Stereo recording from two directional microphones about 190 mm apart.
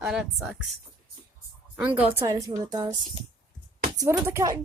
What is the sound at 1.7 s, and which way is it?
Speech, 5° right (ahead or behind).